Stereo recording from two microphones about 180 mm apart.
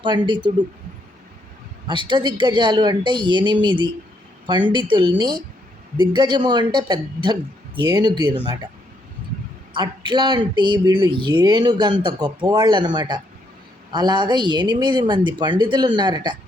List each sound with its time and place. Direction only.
0.0 s speech: 25° right (ahead or behind)
1.9 s speech: 25° right (ahead or behind)
9.7 s speech: 25° right (ahead or behind)